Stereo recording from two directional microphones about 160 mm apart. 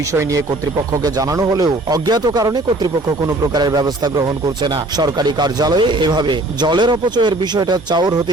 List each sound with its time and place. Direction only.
0.1 s speech: 20° right (ahead or behind)